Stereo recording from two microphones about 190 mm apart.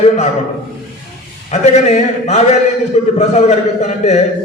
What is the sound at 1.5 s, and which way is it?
A man's voice, 35° left (ahead or behind).